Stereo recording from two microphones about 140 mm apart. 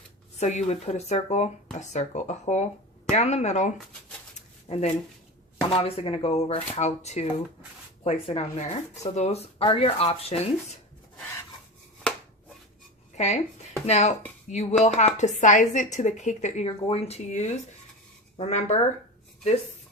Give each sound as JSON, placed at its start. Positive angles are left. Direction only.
{"t": 0.3, "sound": "speech", "side_deg": 55}
{"t": 4.4, "sound": "a sound", "side_deg": 50}
{"t": 5.7, "sound": "speech", "side_deg": 40}
{"t": 13.1, "sound": "speech", "side_deg": 55}
{"t": 16.6, "sound": "speech", "side_deg": 45}